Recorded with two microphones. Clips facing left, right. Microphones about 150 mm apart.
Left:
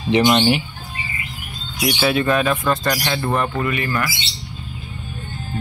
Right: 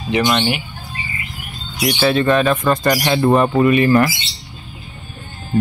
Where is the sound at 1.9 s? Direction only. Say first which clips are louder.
Right 3 dB; 5° left (ahead or behind).